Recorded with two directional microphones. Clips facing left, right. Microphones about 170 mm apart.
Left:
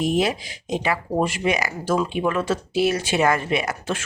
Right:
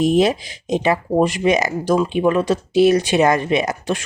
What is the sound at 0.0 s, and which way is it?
Speech, 20° right (ahead or behind).